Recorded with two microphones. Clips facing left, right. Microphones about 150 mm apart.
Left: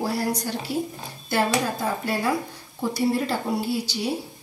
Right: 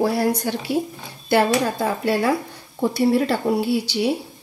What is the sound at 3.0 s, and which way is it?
Speech, 70° right (ahead or behind).